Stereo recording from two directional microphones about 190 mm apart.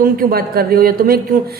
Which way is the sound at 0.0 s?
50° right (ahead or behind).